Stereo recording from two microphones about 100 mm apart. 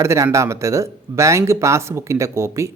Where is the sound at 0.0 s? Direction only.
30° right (ahead or behind).